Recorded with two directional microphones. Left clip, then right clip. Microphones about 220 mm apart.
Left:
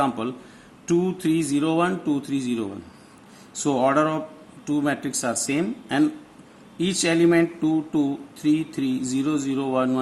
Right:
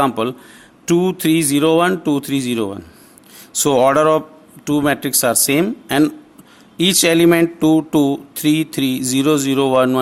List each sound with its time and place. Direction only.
0.0 s speech: 40° right (ahead or behind)